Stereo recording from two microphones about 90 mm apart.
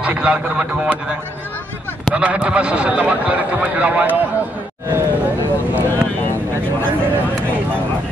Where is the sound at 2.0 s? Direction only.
15° right (ahead or behind).